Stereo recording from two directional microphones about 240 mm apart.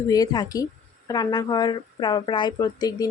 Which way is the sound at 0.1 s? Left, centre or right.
Centre.